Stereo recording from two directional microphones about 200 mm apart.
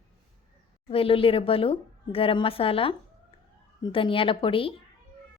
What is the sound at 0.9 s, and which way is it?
A woman's voice, 30° left (ahead or behind).